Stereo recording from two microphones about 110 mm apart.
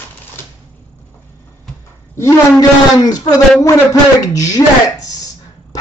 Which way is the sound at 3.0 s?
35° left (ahead or behind).